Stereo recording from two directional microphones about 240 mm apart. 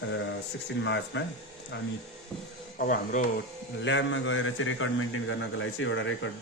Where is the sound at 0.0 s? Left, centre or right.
Left.